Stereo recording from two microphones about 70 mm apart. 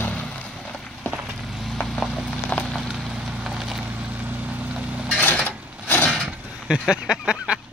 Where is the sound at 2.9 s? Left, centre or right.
Centre.